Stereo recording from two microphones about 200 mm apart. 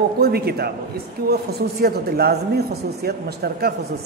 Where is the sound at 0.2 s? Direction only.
50° right (ahead or behind).